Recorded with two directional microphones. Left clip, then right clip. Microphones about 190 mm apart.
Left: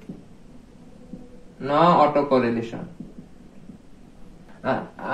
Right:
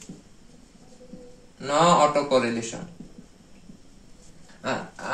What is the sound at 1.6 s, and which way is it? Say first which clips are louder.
Speech: left 2 dB; 20° right (ahead or behind).